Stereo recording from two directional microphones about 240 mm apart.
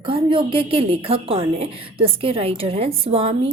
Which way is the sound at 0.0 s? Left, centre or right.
Right.